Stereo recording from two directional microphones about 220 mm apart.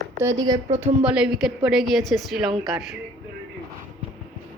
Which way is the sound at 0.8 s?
5° right (ahead or behind).